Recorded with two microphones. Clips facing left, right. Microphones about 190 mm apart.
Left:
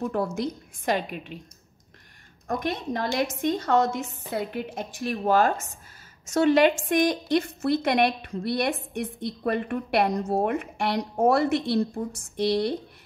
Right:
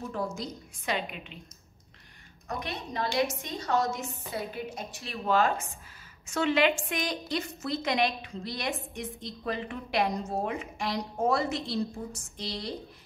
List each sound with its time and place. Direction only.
0.0 s a woman's voice: 60° left (ahead or behind); by 1.4 s 45° left (ahead or behind)
2.4 s a woman's voice: 50° left (ahead or behind)
5.1 s a woman's voice: 45° left (ahead or behind); by 12.7 s 60° left (ahead or behind)